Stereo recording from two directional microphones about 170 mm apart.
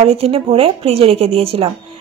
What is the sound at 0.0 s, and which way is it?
Speech, 35° right (ahead or behind).